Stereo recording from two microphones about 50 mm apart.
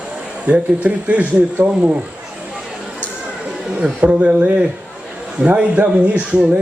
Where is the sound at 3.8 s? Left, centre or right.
Right.